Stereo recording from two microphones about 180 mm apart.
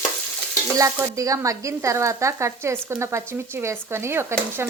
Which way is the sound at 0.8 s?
15° right (ahead or behind).